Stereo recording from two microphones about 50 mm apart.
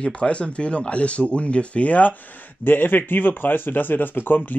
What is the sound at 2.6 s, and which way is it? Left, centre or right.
Speech, left.